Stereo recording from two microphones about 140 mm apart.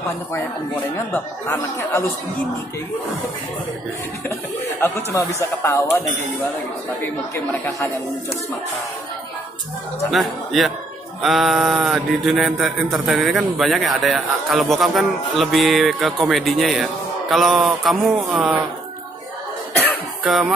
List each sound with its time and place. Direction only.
0.9 s speech: 20° left (ahead or behind)
4.7 s speech: 20° left (ahead or behind)
7.3 s speech: 15° left (ahead or behind)
10.1 s speech: centre (ahead or behind)
20.2 s speech: centre (ahead or behind)